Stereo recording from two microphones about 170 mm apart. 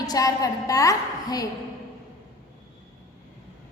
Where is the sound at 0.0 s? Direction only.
20° left (ahead or behind).